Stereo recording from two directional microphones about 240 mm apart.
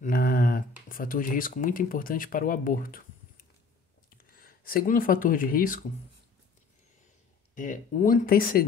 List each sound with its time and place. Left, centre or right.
0.0 s speech: left
7.5 s speech: left